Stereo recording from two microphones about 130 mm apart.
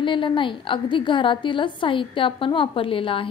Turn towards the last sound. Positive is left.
turn(degrees=45)  # may be behind; listen again after turning